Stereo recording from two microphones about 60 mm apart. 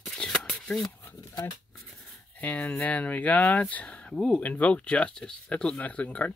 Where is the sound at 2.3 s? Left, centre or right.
Left.